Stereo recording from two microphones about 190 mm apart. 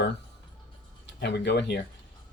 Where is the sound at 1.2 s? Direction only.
65° left (ahead or behind).